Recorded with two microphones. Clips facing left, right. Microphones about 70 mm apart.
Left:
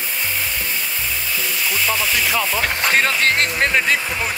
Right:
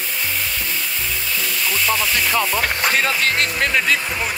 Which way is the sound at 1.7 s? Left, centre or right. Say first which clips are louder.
Right 1 dB; centre.